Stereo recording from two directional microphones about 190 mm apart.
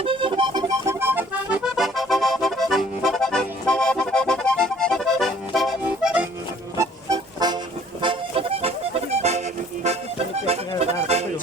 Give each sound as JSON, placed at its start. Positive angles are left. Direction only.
{"t": 0.0, "sound": "accordion", "side_deg": -25}
{"t": 6.7, "sound": "music", "side_deg": -20}
{"t": 8.0, "sound": "accordion", "side_deg": -30}
{"t": 10.4, "sound": "accordion", "side_deg": -35}
{"t": 11.0, "sound": "music", "side_deg": -35}